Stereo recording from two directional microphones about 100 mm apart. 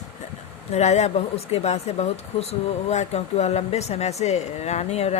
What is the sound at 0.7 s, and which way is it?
Speech, 90° left.